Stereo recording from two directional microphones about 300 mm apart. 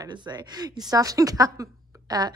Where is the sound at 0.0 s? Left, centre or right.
Centre.